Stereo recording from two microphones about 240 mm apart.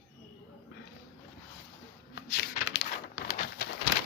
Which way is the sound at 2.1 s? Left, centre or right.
Left.